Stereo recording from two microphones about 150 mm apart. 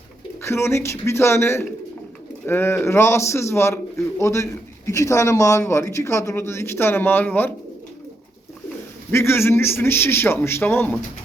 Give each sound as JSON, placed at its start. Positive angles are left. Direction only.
{"t": 0.4, "sound": "a man's voice", "side_deg": 15}
{"t": 9.1, "sound": "a man's voice", "side_deg": 15}